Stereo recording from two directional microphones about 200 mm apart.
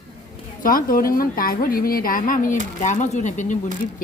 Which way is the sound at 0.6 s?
45° left (ahead or behind).